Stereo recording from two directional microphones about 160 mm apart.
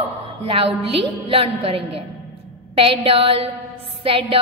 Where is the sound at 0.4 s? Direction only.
35° right (ahead or behind).